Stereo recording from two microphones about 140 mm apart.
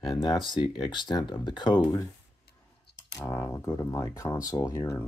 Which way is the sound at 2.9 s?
25° left (ahead or behind).